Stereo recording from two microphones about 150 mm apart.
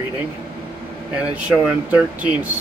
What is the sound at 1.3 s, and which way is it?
Speech, 10° right (ahead or behind).